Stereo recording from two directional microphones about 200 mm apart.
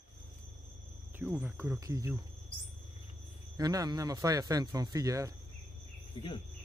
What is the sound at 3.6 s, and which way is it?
Speech, 20° right (ahead or behind).